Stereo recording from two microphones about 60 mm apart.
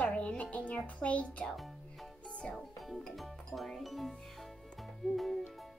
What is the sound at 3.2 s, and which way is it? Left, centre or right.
Music, centre.